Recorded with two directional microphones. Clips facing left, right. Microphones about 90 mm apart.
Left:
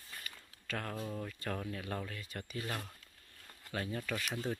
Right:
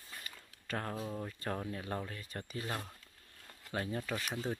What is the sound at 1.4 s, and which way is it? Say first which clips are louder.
Speech: right 1 dB; 25° right (ahead or behind).